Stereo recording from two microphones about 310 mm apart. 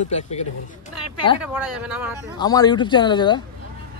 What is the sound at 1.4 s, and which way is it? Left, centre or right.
Speech, centre.